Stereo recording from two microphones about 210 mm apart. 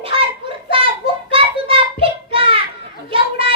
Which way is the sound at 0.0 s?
25° right (ahead or behind).